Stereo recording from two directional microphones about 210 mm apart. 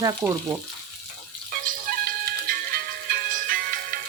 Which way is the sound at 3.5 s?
45° right (ahead or behind).